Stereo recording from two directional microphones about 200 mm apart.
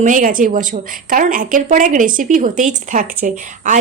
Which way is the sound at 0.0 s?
40° right (ahead or behind).